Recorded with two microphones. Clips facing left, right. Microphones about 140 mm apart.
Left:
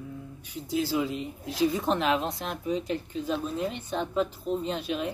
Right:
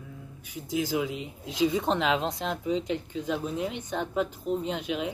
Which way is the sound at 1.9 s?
90° right.